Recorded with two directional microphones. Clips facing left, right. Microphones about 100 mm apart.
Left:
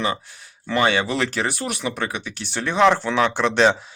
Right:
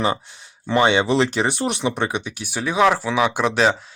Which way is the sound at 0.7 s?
20° right (ahead or behind).